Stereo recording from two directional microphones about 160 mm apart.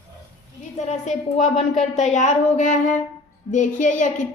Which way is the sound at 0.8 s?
45° left (ahead or behind).